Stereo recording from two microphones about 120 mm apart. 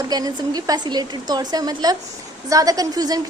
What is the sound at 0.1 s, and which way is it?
A woman's voice, 30° right (ahead or behind).